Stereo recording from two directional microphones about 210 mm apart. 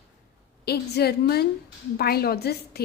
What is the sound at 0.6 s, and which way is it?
A woman's voice, 50° left (ahead or behind).